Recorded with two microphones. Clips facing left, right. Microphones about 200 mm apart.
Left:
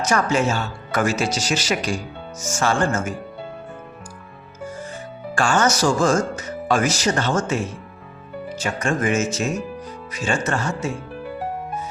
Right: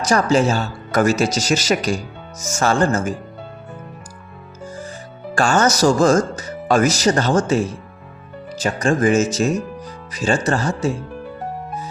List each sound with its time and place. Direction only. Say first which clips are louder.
0.1 s speech: right 5 dB; 35° right (ahead or behind)
5.3 s speech: right 3 dB; 40° right (ahead or behind)